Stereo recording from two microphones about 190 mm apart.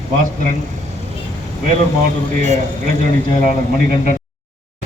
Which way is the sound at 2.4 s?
40° right (ahead or behind).